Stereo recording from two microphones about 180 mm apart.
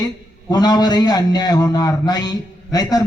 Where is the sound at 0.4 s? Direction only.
20° left (ahead or behind).